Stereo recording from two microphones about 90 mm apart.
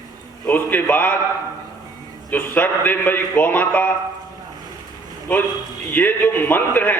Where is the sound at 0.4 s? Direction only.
20° left (ahead or behind).